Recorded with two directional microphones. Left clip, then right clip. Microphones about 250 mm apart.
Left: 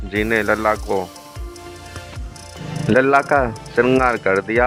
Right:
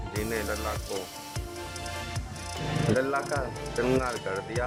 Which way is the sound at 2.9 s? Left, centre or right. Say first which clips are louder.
Left 15 dB; centre.